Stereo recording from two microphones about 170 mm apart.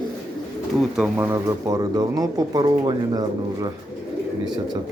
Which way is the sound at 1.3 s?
20° right (ahead or behind).